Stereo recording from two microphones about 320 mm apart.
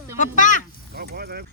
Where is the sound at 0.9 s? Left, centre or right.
Right.